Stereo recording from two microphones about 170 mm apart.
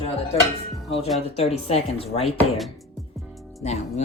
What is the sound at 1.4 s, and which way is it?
Speech, 35° left (ahead or behind).